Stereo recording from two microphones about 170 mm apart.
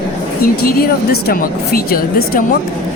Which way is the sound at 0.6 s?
60° left (ahead or behind).